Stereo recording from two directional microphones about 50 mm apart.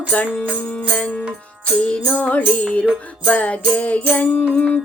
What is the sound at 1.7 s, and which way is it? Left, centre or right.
Music, centre.